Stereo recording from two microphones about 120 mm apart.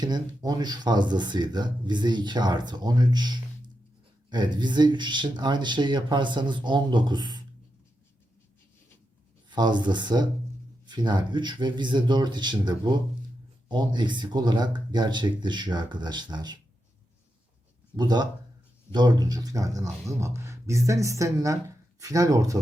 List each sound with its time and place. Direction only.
0.0 s speech: 35° right (ahead or behind)
9.5 s speech: 40° right (ahead or behind)
17.9 s speech: 35° right (ahead or behind)